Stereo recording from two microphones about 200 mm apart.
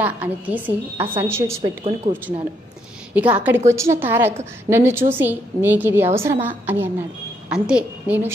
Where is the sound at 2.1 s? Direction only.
25° right (ahead or behind).